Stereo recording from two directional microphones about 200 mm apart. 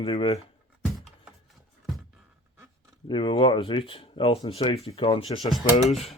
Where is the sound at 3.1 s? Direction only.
25° left (ahead or behind).